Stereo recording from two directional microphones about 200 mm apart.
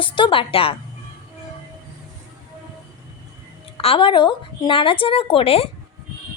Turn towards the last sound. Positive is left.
turn(degrees=30)  # may be behind; listen again after turning